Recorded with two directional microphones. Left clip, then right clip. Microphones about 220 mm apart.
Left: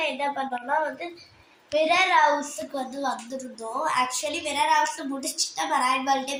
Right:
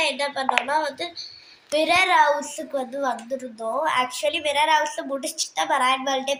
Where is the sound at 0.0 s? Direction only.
45° right (ahead or behind).